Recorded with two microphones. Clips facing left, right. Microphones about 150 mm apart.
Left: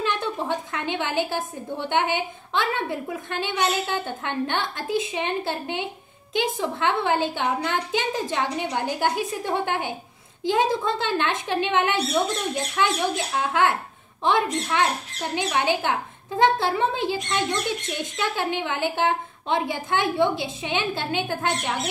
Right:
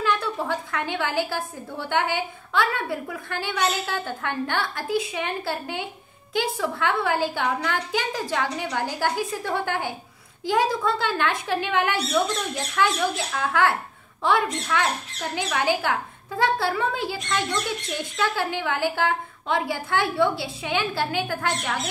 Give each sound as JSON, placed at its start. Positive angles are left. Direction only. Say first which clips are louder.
{"t": 0.0, "sound": "a woman's voice", "louder": "right 1 dB", "side_deg": 20}